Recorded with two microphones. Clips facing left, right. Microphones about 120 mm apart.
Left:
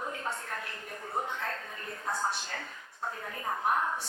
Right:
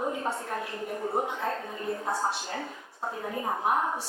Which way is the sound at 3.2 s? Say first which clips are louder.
Right 4 dB; 20° right (ahead or behind).